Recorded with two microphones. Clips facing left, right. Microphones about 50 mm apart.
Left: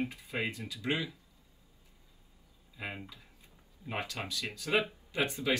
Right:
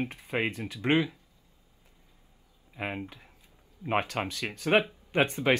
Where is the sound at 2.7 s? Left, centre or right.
Right.